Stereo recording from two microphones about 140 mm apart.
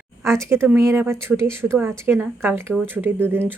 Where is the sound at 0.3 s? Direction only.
20° right (ahead or behind).